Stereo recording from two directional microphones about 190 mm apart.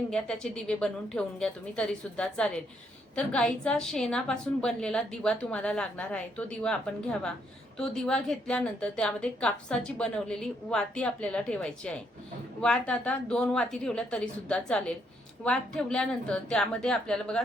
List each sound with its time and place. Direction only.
0.1 s a woman's voice: 5° left (ahead or behind)